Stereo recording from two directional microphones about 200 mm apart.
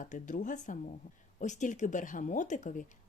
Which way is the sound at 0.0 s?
40° left (ahead or behind).